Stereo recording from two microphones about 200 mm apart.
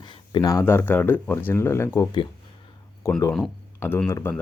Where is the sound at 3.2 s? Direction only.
10° left (ahead or behind).